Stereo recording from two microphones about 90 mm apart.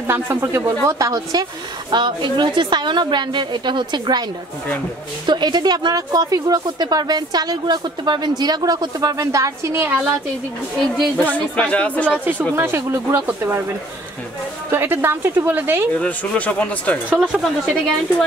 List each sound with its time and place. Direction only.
0.0 s a woman's voice: 25° right (ahead or behind); by 4.2 s 55° right (ahead or behind)
5.2 s a woman's voice: 55° right (ahead or behind); by 9.8 s 35° right (ahead or behind)
9.8 s a woman's voice: 20° right (ahead or behind)
11.1 s speech: 15° left (ahead or behind)
12.5 s a woman's voice: 25° right (ahead or behind)
14.7 s a woman's voice: 25° right (ahead or behind)
16.0 s a woman's voice: 15° left (ahead or behind)